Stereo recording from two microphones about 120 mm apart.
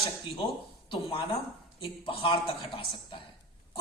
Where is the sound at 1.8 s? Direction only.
50° left (ahead or behind).